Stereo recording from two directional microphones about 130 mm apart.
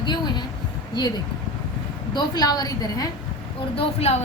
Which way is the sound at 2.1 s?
30° left (ahead or behind).